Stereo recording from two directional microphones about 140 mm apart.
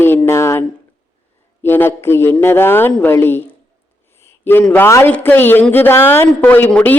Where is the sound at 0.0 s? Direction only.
15° left (ahead or behind).